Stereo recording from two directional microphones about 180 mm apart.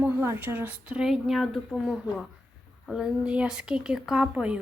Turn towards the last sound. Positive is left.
turn(degrees=-5)  # may be behind; listen again after turning